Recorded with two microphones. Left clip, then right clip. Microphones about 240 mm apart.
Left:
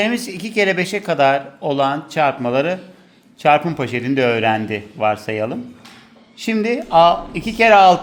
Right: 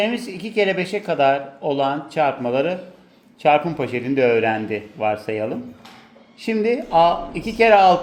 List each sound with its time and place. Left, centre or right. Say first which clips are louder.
0.0 s speech: left 2 dB; left